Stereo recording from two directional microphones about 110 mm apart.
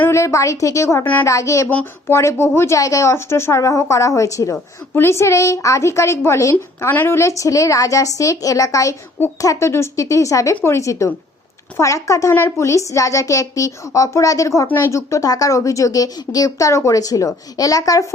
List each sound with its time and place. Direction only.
0.0 s a woman's voice: 25° left (ahead or behind)